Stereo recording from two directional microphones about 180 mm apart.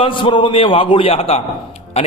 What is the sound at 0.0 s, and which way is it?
A man's voice, 25° left (ahead or behind).